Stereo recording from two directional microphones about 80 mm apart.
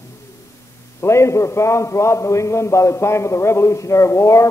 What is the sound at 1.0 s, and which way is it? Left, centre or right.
A man's voice, left.